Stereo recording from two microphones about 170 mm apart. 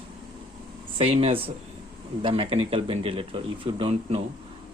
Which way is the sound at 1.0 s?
35° right (ahead or behind).